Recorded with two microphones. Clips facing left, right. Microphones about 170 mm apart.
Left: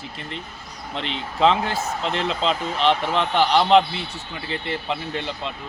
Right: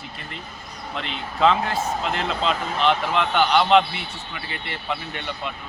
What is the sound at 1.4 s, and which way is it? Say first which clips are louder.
A man's voice: even; 30° left (ahead or behind).